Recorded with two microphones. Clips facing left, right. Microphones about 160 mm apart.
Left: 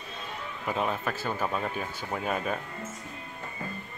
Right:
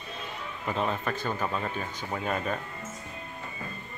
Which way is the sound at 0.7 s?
5° left (ahead or behind).